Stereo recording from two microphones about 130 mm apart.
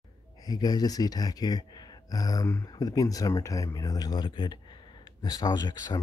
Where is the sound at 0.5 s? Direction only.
30° left (ahead or behind).